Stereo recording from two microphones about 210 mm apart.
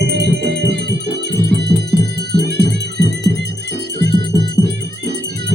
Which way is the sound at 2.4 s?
50° right (ahead or behind).